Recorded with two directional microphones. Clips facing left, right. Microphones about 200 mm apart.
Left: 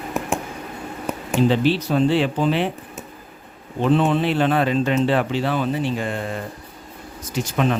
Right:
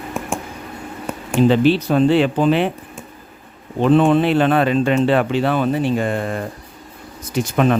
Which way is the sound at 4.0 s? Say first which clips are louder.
Right 5 dB; 55° right (ahead or behind).